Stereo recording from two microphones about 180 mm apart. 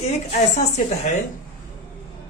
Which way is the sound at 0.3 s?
40° left (ahead or behind).